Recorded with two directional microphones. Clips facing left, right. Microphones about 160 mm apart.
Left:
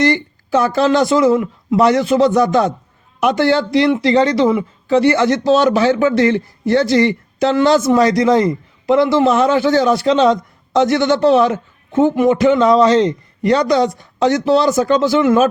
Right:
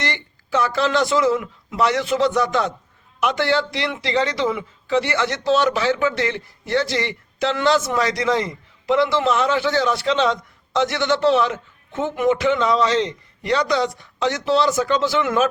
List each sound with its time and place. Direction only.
0.0 s speech: 40° left (ahead or behind)